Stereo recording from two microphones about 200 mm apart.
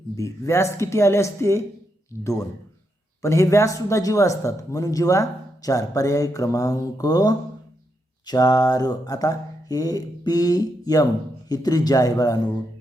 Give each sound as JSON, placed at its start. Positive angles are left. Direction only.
{"t": 0.2, "sound": "speech", "side_deg": 15}
{"t": 3.2, "sound": "speech", "side_deg": 15}